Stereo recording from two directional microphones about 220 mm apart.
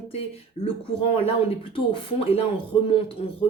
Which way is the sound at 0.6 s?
25° left (ahead or behind).